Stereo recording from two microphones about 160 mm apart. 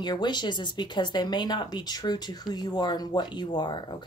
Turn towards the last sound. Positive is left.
turn(degrees=30)  # may be behind; listen again after turning